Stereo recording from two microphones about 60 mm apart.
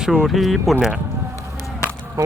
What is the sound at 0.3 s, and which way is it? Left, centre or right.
Speech, centre.